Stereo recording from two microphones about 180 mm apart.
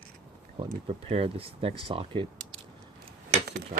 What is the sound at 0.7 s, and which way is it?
Speech, 35° right (ahead or behind).